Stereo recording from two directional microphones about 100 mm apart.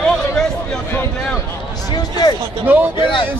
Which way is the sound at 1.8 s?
45° left (ahead or behind).